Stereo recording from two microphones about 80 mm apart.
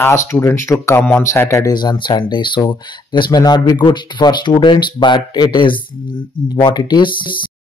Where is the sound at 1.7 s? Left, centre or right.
Left.